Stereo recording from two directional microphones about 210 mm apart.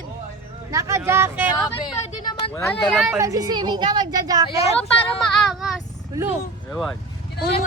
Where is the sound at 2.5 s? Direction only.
10° left (ahead or behind).